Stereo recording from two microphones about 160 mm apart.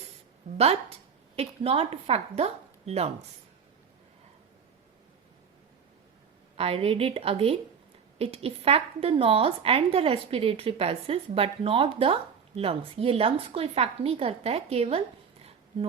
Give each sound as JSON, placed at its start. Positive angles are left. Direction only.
{"t": 0.5, "sound": "a woman's voice", "side_deg": -40}
{"t": 6.6, "sound": "a woman's voice", "side_deg": -40}